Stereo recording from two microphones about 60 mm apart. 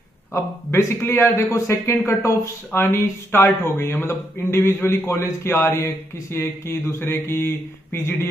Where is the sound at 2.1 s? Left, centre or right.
Left.